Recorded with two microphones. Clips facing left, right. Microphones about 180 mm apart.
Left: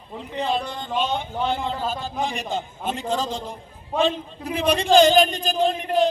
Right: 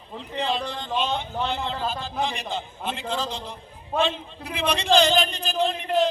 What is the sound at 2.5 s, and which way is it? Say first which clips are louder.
A man's voice: left 3 dB; 50° left (ahead or behind).